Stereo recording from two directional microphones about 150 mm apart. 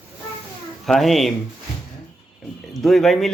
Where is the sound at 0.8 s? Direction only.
Centre (ahead or behind).